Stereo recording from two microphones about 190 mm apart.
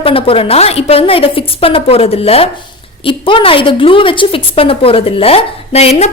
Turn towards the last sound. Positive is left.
turn(degrees=35)  # may be behind; listen again after turning